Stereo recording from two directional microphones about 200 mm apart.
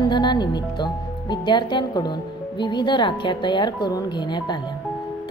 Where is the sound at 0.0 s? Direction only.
20° left (ahead or behind).